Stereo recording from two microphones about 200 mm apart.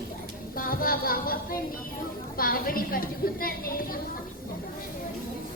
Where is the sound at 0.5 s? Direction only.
45° left (ahead or behind).